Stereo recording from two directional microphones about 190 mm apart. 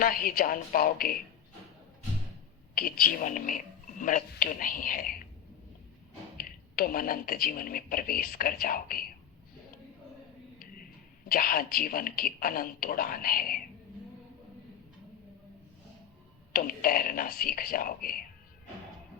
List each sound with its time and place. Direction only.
0.0 s speech: 50° left (ahead or behind)
2.7 s speech: 50° left (ahead or behind)
6.3 s speech: 50° left (ahead or behind)
11.3 s speech: 50° left (ahead or behind)
16.5 s speech: 50° left (ahead or behind)